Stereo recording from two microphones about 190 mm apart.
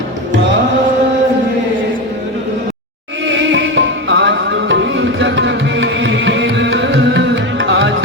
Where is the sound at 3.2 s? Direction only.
75° right (ahead or behind).